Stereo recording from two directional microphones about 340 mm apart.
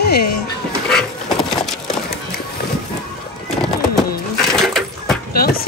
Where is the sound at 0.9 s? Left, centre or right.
Centre.